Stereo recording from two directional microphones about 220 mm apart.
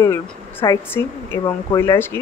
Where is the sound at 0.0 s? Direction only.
10° left (ahead or behind).